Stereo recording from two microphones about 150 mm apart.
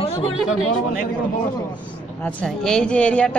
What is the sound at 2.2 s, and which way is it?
A woman's voice, 5° left (ahead or behind).